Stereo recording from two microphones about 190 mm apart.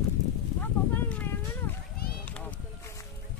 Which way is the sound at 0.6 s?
10° left (ahead or behind).